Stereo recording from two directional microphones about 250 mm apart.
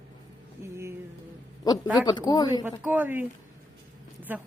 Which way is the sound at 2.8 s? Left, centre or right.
Centre.